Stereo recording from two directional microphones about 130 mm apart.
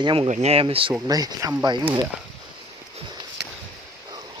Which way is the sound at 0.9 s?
30° right (ahead or behind).